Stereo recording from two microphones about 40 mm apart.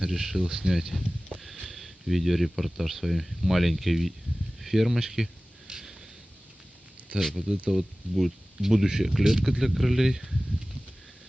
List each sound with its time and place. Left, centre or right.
0.0 s speech: centre
5.7 s a sound: right
7.1 s speech: right
7.7 s speech: centre